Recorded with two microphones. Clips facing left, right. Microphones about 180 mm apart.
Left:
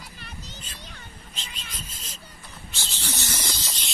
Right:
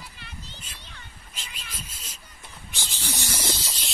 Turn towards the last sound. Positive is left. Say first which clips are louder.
# right 3 dB
turn(degrees=-5)  # may be behind; listen again after turning